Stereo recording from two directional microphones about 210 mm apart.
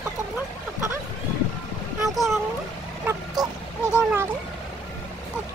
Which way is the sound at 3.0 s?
15° right (ahead or behind).